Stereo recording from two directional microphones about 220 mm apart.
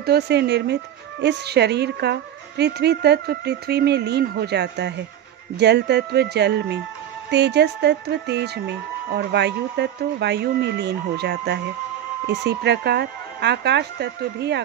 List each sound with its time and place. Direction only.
0.0 s speech: 45° right (ahead or behind)